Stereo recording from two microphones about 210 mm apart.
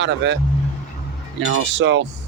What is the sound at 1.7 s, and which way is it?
Speech, 60° right (ahead or behind).